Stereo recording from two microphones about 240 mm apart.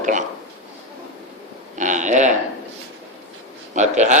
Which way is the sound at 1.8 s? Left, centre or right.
Right.